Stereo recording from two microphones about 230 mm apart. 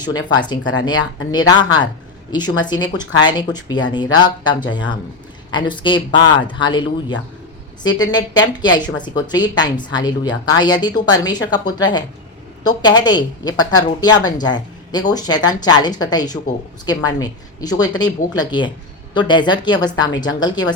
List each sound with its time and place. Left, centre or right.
0.0 s a woman's voice: centre
7.9 s a woman's voice: centre